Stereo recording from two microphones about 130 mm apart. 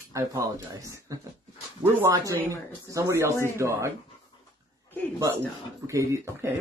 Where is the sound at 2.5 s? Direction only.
25° right (ahead or behind).